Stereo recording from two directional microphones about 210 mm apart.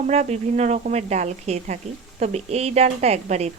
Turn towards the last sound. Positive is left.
turn(degrees=-30)  # may be behind; listen again after turning